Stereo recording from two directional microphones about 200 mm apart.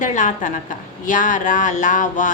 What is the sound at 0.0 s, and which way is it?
Speech, 40° left (ahead or behind).